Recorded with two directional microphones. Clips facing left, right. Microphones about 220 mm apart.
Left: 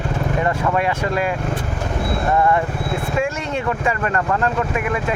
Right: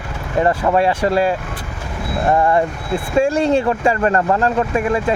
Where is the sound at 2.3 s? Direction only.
35° right (ahead or behind).